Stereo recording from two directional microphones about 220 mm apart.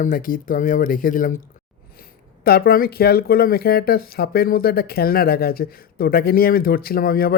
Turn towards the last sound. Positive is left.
turn(degrees=45)  # may be behind; listen again after turning